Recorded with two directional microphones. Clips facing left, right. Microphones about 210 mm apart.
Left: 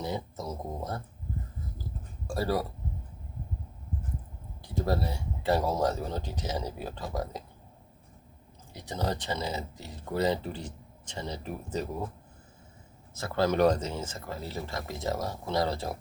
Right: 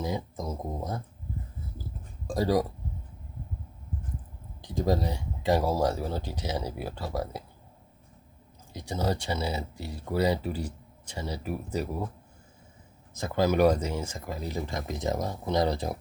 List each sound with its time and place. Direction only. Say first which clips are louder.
0.3 s speech: right 2 dB; 15° right (ahead or behind)
2.2 s speech: right 4 dB; 15° right (ahead or behind)
4.6 s speech: right 3 dB; 15° right (ahead or behind)
8.7 s speech: right 3 dB; 15° right (ahead or behind)
13.1 s speech: right 2 dB; 15° right (ahead or behind)